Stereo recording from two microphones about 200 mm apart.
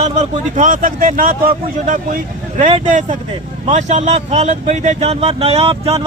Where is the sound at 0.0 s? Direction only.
35° right (ahead or behind).